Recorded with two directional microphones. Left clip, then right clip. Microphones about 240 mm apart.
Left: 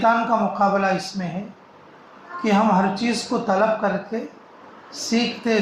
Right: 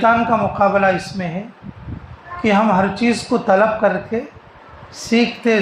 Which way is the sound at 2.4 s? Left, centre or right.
Right.